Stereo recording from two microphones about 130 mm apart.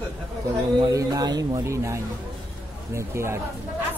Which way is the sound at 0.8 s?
25° right (ahead or behind).